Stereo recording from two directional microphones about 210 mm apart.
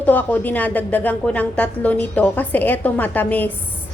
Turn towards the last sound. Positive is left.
turn(degrees=10)  # may be behind; listen again after turning